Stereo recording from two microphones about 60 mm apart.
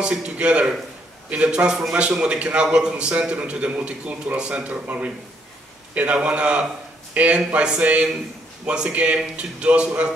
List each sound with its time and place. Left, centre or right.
0.0 s a man's voice: centre